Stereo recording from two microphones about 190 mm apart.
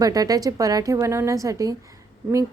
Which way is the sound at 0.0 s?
20° right (ahead or behind).